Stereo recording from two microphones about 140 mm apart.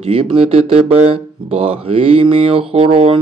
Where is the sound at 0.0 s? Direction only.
40° right (ahead or behind).